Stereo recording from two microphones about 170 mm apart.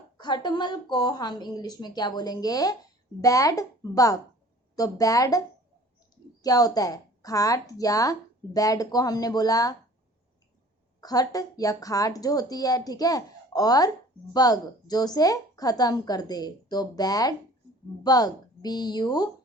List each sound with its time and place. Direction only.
0.2 s a woman's voice: 25° left (ahead or behind)
6.4 s a woman's voice: 20° left (ahead or behind)
11.0 s a woman's voice: 20° left (ahead or behind)